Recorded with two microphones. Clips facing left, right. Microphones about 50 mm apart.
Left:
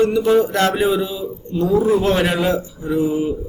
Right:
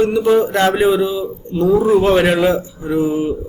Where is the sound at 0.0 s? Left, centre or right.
Centre.